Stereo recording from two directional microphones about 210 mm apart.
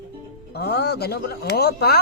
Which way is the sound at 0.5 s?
50° left (ahead or behind).